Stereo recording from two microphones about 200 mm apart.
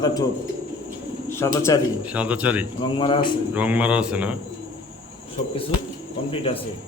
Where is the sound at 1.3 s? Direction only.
15° left (ahead or behind).